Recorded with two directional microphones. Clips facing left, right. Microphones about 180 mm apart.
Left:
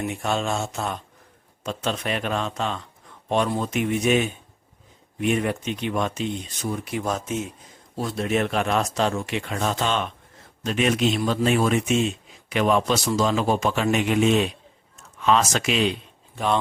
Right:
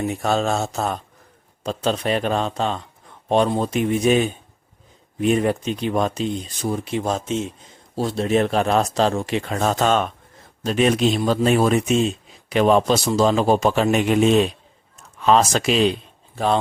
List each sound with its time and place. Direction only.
0.0 s speech: 35° right (ahead or behind)